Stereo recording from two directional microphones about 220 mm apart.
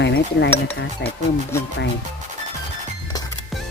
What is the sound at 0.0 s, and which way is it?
Speech, 50° left (ahead or behind).